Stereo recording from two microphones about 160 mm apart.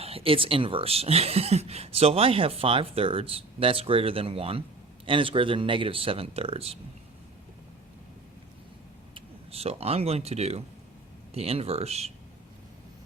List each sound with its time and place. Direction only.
0.0 s speech: 35° right (ahead or behind)
9.1 s speech: 40° right (ahead or behind)